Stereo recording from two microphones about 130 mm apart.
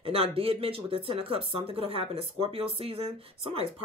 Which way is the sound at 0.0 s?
50° right (ahead or behind).